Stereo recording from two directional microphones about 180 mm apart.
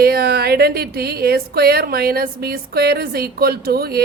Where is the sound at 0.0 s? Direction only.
60° right (ahead or behind).